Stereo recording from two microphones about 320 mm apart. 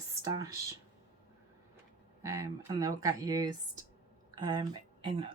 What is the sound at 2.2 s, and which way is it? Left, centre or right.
Speech, centre.